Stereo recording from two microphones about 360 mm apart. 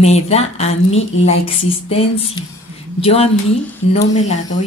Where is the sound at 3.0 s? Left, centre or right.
Centre.